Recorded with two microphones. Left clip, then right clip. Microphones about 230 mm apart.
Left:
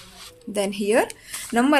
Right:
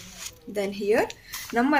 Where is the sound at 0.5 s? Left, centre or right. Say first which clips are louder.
Left 3 dB; left.